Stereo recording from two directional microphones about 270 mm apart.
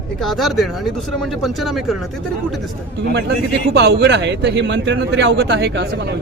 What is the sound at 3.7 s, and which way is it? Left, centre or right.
Speech, right.